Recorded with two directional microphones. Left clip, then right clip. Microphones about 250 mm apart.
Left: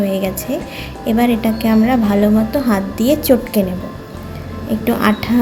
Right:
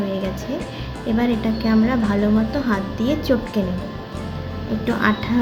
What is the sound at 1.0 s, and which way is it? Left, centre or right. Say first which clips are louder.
A woman's voice: left 6 dB; centre.